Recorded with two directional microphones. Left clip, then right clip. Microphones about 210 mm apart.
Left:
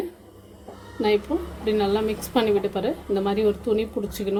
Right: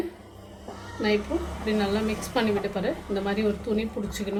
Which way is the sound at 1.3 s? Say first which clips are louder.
Left 4 dB; 35° left (ahead or behind).